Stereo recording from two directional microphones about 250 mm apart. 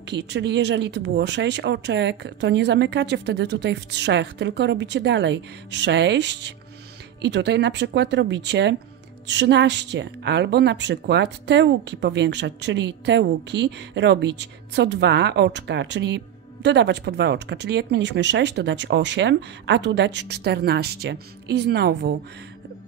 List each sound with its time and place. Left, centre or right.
0.1 s a woman's voice: right